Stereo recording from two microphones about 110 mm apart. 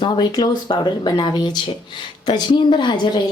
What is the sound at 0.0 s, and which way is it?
A woman's voice, 40° left (ahead or behind).